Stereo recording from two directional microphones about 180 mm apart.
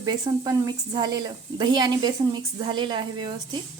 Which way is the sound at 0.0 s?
20° right (ahead or behind).